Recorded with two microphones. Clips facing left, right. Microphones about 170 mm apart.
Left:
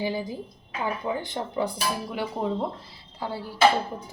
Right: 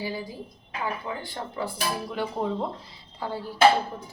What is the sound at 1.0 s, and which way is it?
Speech, 20° left (ahead or behind).